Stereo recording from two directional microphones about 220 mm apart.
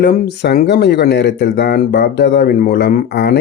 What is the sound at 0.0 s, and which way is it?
Speech, 45° left (ahead or behind).